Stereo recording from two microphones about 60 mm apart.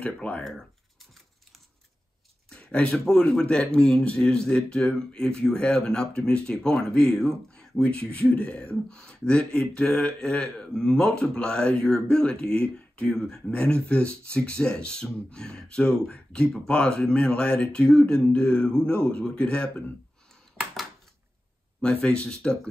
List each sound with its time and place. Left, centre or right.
0.0 s speech: left
0.4 s speech: centre
2.5 s speech: centre
21.8 s speech: centre